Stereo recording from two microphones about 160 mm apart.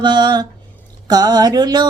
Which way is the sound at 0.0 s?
25° right (ahead or behind).